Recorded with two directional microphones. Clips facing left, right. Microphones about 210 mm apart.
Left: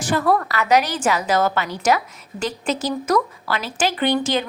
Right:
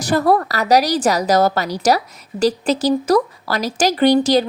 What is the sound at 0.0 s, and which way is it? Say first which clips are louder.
Speech: right 4 dB; 40° right (ahead or behind).